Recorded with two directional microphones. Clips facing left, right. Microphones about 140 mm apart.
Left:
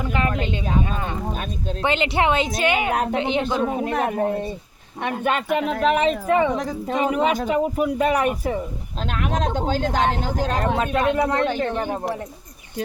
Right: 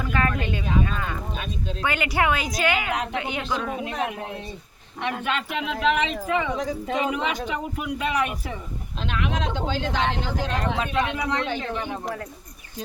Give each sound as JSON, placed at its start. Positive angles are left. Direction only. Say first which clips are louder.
{"t": 0.0, "sound": "a woman's voice", "louder": "left 2 dB", "side_deg": 25}
{"t": 1.3, "sound": "speech", "louder": "left 3 dB", "side_deg": 45}
{"t": 1.8, "sound": "a woman's voice", "louder": "left 3 dB", "side_deg": 25}
{"t": 2.9, "sound": "speech", "louder": "left 5 dB", "side_deg": 45}
{"t": 3.2, "sound": "a woman's voice", "louder": "left 7 dB", "side_deg": 25}
{"t": 3.8, "sound": "speech", "louder": "left 7 dB", "side_deg": 50}